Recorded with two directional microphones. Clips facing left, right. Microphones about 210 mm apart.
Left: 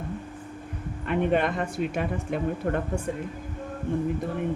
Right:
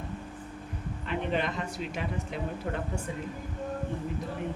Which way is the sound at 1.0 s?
55° left (ahead or behind).